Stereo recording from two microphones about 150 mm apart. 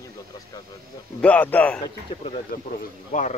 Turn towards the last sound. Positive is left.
turn(degrees=60)  # may be behind; listen again after turning